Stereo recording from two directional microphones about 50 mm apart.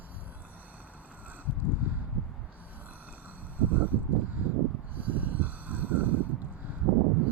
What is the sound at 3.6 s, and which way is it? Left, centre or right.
Vehicle, right.